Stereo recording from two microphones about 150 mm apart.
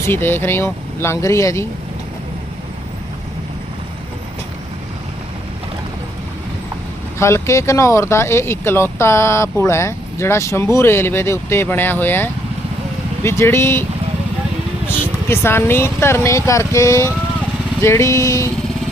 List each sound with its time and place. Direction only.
0.0 s speech: 15° left (ahead or behind)
7.2 s speech: 20° left (ahead or behind)
14.8 s speech: 15° left (ahead or behind)
17.8 s vehicle: 20° left (ahead or behind)